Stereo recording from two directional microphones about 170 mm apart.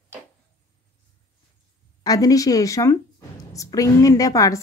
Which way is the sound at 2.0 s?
20° left (ahead or behind).